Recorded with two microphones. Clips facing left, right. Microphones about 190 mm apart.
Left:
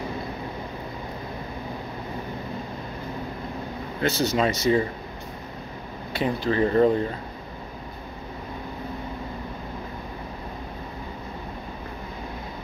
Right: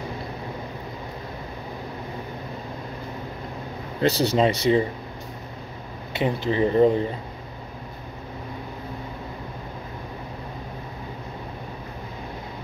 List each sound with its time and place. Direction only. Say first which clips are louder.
4.0 s speech: right 3 dB; 30° right (ahead or behind)
6.1 s speech: even; 20° right (ahead or behind)